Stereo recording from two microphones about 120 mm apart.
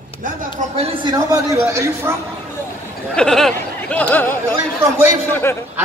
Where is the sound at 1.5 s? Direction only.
20° right (ahead or behind).